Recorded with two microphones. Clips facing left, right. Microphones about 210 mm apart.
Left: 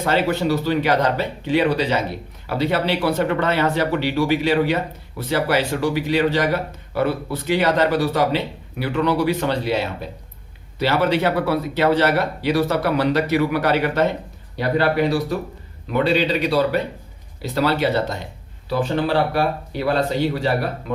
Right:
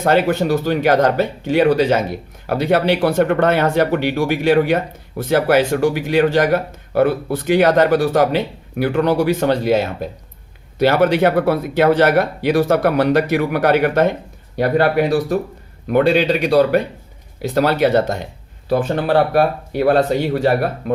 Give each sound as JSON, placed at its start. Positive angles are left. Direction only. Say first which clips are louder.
{"t": 0.0, "sound": "speech", "louder": "right 4 dB", "side_deg": -50}